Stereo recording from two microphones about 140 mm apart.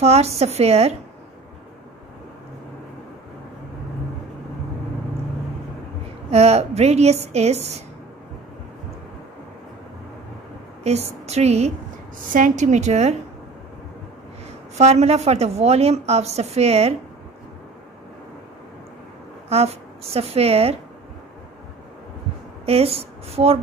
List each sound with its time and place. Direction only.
0.0 s a woman's voice: 50° right (ahead or behind)
6.3 s a woman's voice: 50° right (ahead or behind)
10.8 s a woman's voice: 50° right (ahead or behind)
12.3 s a woman's voice: 70° right (ahead or behind); by 13.2 s 50° right (ahead or behind)
14.8 s a woman's voice: 50° right (ahead or behind)
19.5 s a woman's voice: 45° right (ahead or behind)
22.7 s a woman's voice: 45° right (ahead or behind)